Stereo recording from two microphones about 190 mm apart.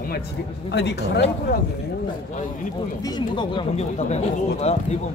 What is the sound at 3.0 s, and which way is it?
A man's voice, 20° left (ahead or behind).